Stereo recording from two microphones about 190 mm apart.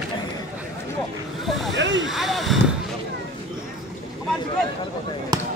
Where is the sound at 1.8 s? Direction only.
75° right (ahead or behind).